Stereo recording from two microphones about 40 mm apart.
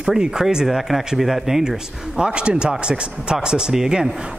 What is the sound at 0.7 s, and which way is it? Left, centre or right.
Speech, centre.